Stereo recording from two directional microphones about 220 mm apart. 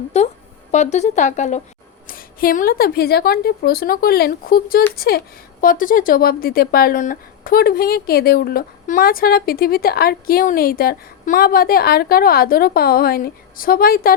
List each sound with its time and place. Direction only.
0.1 s a woman's voice: 30° left (ahead or behind)